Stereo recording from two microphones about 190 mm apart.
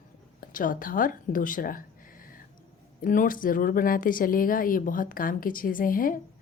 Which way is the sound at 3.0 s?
45° left (ahead or behind).